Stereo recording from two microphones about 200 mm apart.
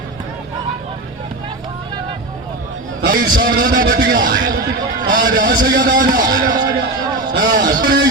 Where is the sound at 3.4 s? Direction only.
65° right (ahead or behind).